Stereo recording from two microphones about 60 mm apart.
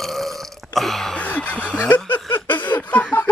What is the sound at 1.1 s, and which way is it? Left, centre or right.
Snicker, left.